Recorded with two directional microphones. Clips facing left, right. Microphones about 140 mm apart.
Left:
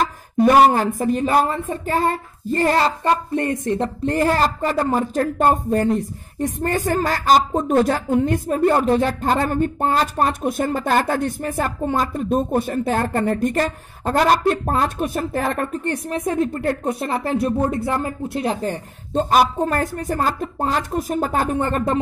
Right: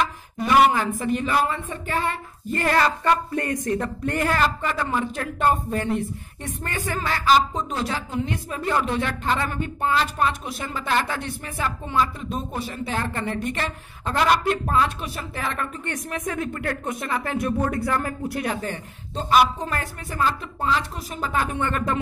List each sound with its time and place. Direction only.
0.0 s speech: 40° left (ahead or behind)
19.1 s speech: 45° left (ahead or behind)